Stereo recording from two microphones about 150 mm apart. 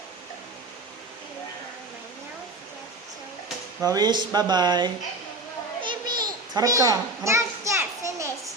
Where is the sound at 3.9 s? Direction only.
30° right (ahead or behind).